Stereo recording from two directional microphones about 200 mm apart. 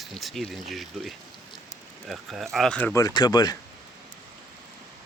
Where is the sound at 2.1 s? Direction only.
Centre (ahead or behind).